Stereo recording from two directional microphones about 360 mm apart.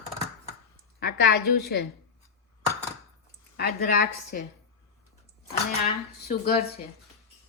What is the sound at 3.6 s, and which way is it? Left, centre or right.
Speech, left.